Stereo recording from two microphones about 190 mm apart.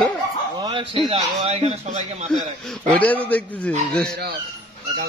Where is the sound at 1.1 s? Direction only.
30° right (ahead or behind).